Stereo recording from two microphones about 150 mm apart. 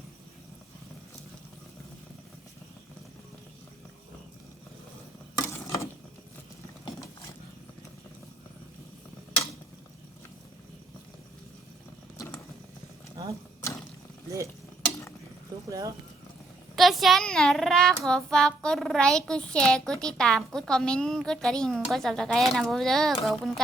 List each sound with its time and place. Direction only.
5.4 s a sound: 20° left (ahead or behind)
12.1 s vehicle: 25° left (ahead or behind)
15.5 s horse: 25° right (ahead or behind)
16.7 s a child's voice: centre (ahead or behind)